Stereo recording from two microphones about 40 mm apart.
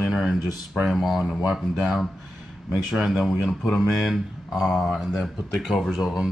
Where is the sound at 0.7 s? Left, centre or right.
Centre.